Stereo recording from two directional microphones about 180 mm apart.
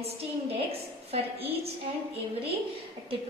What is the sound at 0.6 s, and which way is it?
A woman's voice, 35° right (ahead or behind).